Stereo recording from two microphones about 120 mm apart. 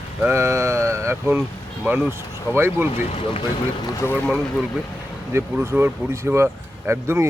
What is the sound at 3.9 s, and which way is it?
Speech, 25° left (ahead or behind).